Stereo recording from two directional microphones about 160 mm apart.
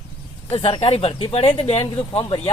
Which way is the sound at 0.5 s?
35° left (ahead or behind).